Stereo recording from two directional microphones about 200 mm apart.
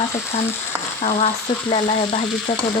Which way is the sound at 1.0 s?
35° left (ahead or behind).